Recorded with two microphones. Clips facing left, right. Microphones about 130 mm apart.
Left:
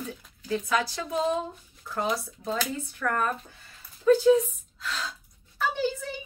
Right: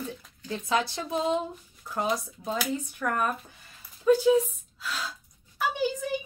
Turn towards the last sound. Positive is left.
turn(degrees=-15)  # may be behind; listen again after turning